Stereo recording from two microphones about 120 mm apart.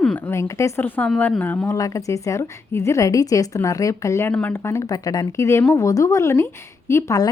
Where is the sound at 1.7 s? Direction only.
25° left (ahead or behind).